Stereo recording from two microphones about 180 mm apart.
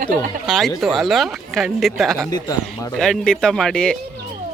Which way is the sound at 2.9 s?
Centre (ahead or behind).